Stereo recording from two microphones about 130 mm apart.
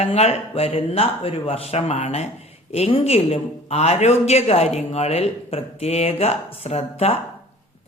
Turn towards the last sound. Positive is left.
turn(degrees=55)  # may be behind; listen again after turning